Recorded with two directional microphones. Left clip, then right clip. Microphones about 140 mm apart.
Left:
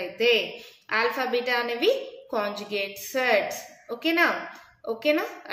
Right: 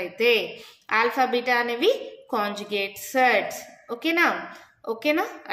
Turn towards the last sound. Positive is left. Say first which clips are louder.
# right 1 dB
turn(degrees=-35)  # may be behind; listen again after turning